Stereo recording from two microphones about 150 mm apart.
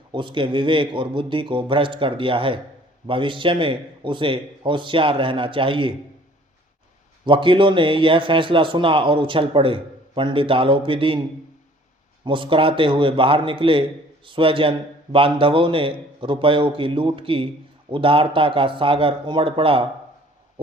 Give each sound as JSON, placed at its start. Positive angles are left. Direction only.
{"t": 0.1, "sound": "speech", "side_deg": -35}
{"t": 7.3, "sound": "speech", "side_deg": -35}
{"t": 12.2, "sound": "speech", "side_deg": -35}